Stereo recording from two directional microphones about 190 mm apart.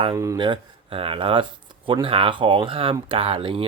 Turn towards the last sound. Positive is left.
turn(degrees=-30)  # may be behind; listen again after turning